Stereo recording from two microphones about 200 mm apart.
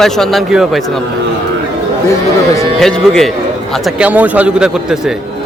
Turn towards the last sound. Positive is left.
turn(degrees=-5)  # may be behind; listen again after turning